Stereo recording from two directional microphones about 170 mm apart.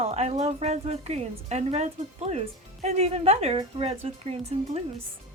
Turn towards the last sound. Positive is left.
turn(degrees=-35)  # may be behind; listen again after turning